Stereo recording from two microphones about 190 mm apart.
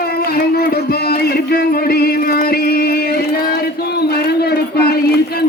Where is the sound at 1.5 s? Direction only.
55° left (ahead or behind).